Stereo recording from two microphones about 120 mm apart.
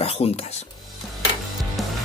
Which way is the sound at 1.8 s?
Centre (ahead or behind).